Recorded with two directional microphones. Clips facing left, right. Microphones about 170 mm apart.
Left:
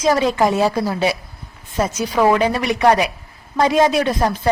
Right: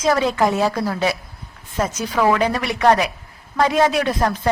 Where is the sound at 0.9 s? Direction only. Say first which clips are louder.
Left 2 dB; 25° left (ahead or behind).